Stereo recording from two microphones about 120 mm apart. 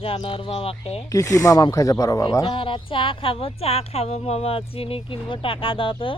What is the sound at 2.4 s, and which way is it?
Speech, 45° left (ahead or behind).